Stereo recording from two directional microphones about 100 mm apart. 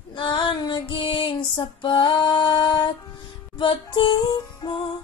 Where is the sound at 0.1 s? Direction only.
50° left (ahead or behind).